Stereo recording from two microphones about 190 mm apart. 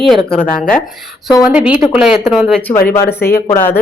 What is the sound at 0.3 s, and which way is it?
Speech, 5° left (ahead or behind).